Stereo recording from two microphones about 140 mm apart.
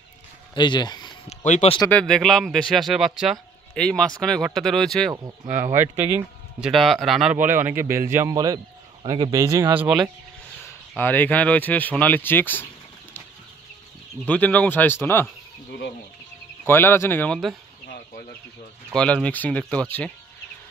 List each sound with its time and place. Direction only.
0.6 s speech: 30° left (ahead or behind)
1.3 s speech: 55° left (ahead or behind)
1.9 s speech: 5° left (ahead or behind)
5.1 s speech: 25° right (ahead or behind)
6.7 s speech: centre (ahead or behind)
7.3 s speech: 15° right (ahead or behind)
10.6 s speech: 15° left (ahead or behind)
14.2 s speech: 10° left (ahead or behind)
16.6 s speech: 15° left (ahead or behind)
18.9 s speech: 10° left (ahead or behind)